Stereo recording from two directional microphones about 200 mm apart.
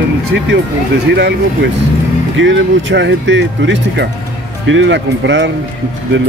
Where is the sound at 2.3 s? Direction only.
65° right (ahead or behind).